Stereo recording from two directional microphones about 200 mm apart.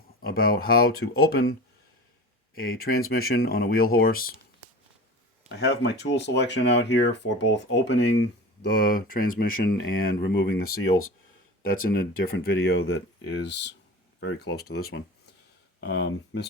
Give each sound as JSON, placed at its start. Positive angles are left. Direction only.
{"t": 0.2, "sound": "speech", "side_deg": 50}
{"t": 2.6, "sound": "speech", "side_deg": 45}
{"t": 5.5, "sound": "speech", "side_deg": 60}
{"t": 10.2, "sound": "speech", "side_deg": 60}
{"t": 11.7, "sound": "speech", "side_deg": 50}